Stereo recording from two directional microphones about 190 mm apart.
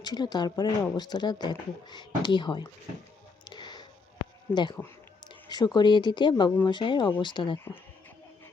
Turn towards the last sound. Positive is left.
turn(degrees=25)  # may be behind; listen again after turning